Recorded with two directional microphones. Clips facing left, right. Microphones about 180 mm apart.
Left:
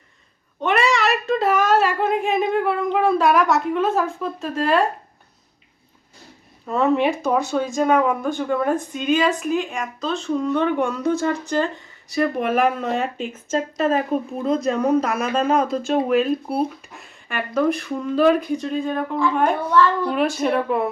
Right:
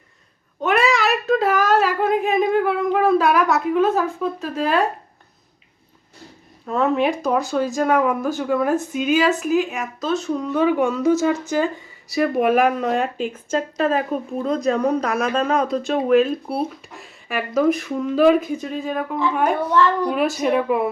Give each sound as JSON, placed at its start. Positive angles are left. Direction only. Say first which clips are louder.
{"t": 0.6, "sound": "a child's voice", "louder": "right 1 dB", "side_deg": 0}
{"t": 6.7, "sound": "speech", "louder": "even", "side_deg": 0}
{"t": 19.7, "sound": "speech", "louder": "left 1 dB", "side_deg": -20}
{"t": 20.1, "sound": "speech", "louder": "right 1 dB", "side_deg": 0}